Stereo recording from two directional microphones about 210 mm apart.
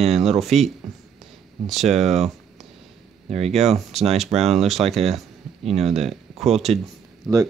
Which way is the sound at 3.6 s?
Centre (ahead or behind).